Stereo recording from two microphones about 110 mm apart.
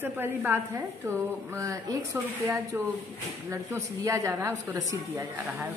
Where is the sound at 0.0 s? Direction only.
20° right (ahead or behind).